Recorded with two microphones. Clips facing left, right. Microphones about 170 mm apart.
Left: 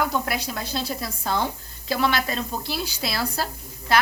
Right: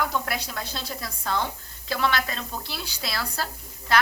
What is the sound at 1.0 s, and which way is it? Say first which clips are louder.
Speech: left 3 dB; 30° left (ahead or behind).